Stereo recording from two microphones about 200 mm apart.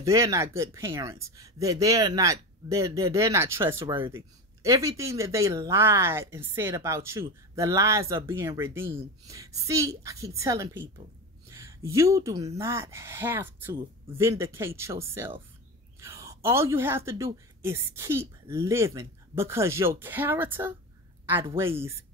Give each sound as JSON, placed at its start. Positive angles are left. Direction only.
{"t": 0.0, "sound": "speech", "side_deg": -15}